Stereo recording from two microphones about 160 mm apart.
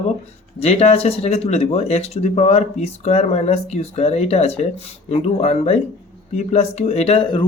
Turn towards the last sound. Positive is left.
turn(degrees=40)  # may be behind; listen again after turning